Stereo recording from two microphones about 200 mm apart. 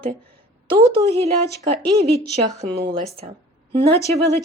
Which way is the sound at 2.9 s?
30° right (ahead or behind).